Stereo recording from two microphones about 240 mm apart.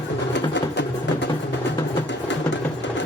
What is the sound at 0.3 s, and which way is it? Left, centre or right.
Music, left.